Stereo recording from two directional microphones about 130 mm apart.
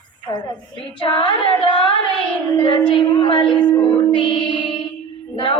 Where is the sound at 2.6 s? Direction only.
40° left (ahead or behind).